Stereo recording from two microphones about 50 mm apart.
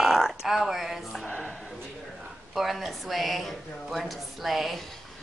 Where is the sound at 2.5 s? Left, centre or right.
Centre.